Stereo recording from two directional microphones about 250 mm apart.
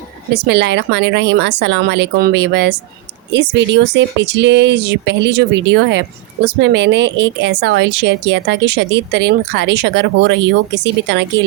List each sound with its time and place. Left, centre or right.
0.3 s speech: right